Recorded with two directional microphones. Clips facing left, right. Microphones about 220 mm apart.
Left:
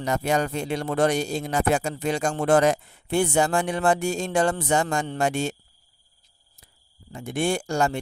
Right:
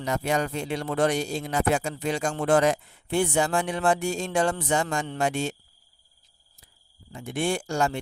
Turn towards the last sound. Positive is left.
turn(degrees=45)  # may be behind; listen again after turning